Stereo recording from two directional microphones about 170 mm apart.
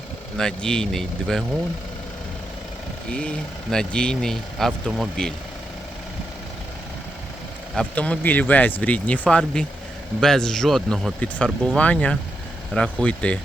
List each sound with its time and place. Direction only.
0.3 s speech: 5° left (ahead or behind)
3.1 s speech: 5° left (ahead or behind)
7.8 s speech: 5° left (ahead or behind)